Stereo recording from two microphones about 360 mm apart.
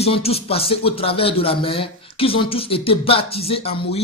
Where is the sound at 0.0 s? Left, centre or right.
Centre.